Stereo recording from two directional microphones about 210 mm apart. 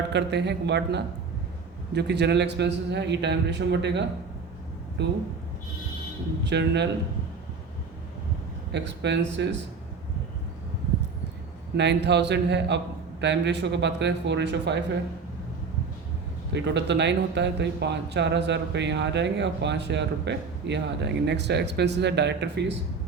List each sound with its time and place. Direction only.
0.1 s a man's voice: 55° right (ahead or behind)
6.4 s a man's voice: 55° right (ahead or behind)
8.7 s a man's voice: 55° right (ahead or behind)
11.8 s a man's voice: 55° right (ahead or behind)
16.5 s a man's voice: 55° right (ahead or behind)